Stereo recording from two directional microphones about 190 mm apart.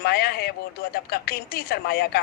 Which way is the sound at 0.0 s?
55° left (ahead or behind).